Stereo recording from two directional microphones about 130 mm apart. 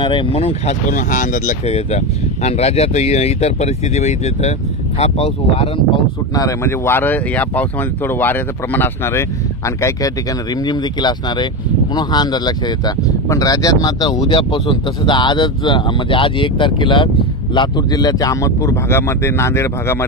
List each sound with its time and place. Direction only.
0.0 s speech: 40° left (ahead or behind)
0.8 s speech: 85° left
1.7 s speech: 55° left (ahead or behind)
6.3 s speech: 25° left (ahead or behind)